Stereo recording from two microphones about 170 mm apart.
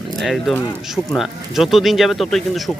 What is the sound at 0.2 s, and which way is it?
Speech, centre (ahead or behind).